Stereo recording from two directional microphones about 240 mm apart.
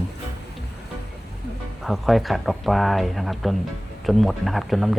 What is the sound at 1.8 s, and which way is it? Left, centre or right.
Speech, centre.